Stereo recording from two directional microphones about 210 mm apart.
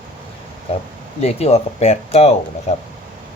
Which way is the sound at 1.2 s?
30° left (ahead or behind).